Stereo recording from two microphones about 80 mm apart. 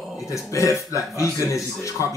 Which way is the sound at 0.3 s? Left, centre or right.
Left.